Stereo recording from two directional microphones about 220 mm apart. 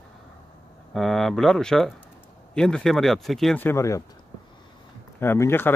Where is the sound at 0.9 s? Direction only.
Centre (ahead or behind).